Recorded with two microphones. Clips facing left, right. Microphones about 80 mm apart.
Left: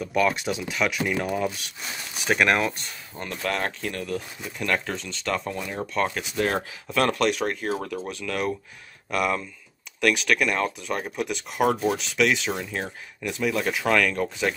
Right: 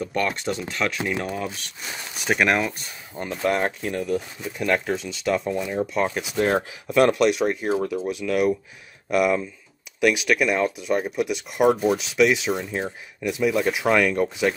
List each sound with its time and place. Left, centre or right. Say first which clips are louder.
0.1 s speech: left 5 dB; centre
3.2 s speech: right 5 dB; centre
6.4 s speech: right 4 dB; right
7.2 s speech: right 4 dB; centre